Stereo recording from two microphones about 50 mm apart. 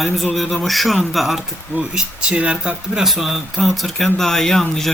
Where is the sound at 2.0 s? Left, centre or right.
Centre.